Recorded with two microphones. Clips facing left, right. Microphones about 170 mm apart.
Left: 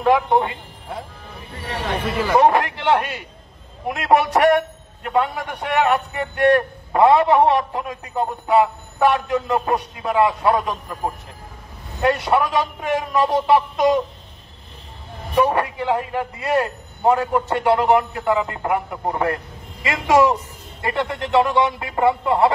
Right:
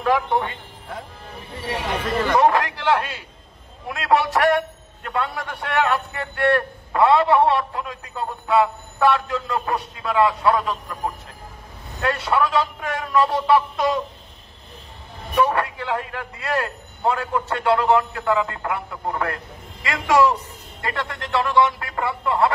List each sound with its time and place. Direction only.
0.0 s a man's voice: 20° left (ahead or behind)
2.3 s a man's voice: 20° left (ahead or behind)
15.3 s a man's voice: 20° left (ahead or behind)